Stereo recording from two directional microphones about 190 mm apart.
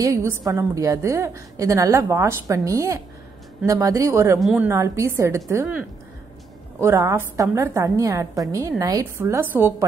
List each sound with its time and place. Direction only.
0.0 s a woman's voice: 15° right (ahead or behind)
4.4 s a woman's voice: centre (ahead or behind)
4.6 s a woman's voice: 15° right (ahead or behind)